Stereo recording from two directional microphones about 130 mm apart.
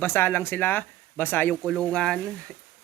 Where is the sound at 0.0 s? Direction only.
15° left (ahead or behind).